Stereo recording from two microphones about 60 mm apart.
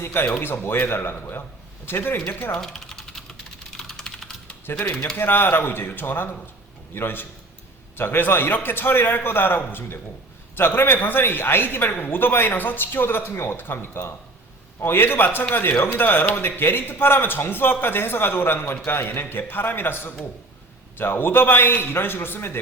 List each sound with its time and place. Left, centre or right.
0.0 s a man's voice: left
2.6 s mechanisms: centre
3.7 s typing: centre
4.6 s speech: left
5.1 s a man's voice: left